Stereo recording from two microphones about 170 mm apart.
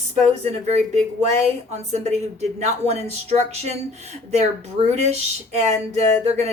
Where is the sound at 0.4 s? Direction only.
40° right (ahead or behind).